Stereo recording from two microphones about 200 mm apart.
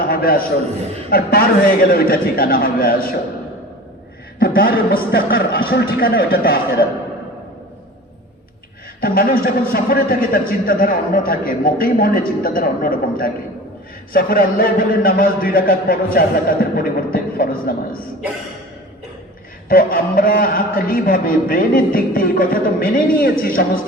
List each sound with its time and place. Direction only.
0.0 s a man's voice: 45° left (ahead or behind)
4.4 s a man's voice: 45° left (ahead or behind)
9.0 s a man's voice: 45° left (ahead or behind)
19.6 s a man's voice: 45° left (ahead or behind)